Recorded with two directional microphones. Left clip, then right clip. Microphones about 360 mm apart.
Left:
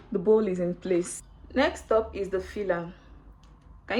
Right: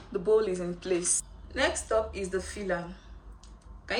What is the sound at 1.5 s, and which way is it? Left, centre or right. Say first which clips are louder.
A woman's voice: left 3 dB; centre.